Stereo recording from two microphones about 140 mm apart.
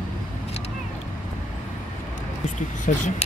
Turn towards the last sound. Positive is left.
turn(degrees=55)  # may be behind; listen again after turning